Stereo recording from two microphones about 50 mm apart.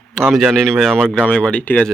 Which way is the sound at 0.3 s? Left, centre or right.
Centre.